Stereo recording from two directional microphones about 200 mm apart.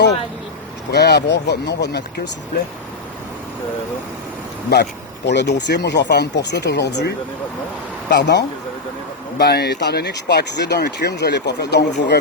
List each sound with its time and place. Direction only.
0.9 s speech: 55° left (ahead or behind)
4.7 s speech: 55° left (ahead or behind)
8.1 s speech: 60° left (ahead or behind)